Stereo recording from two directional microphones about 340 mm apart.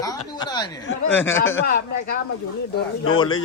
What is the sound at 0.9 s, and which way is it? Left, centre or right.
Speech, left.